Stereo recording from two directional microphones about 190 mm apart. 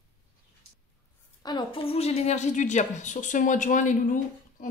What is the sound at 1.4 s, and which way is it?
A woman's voice, 25° left (ahead or behind).